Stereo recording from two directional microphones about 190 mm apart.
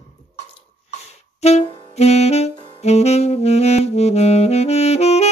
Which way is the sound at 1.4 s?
35° left (ahead or behind).